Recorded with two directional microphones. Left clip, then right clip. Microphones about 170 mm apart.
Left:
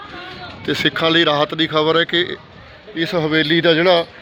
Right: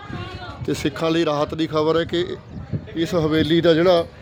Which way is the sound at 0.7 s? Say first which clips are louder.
Left 6 dB; 5° right (ahead or behind).